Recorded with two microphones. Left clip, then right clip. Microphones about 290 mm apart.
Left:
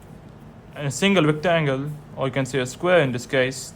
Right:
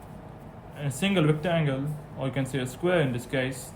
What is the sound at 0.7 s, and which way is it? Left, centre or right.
Speech, left.